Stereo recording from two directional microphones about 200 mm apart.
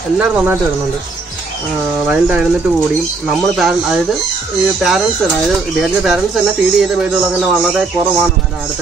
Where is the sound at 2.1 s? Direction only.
5° right (ahead or behind).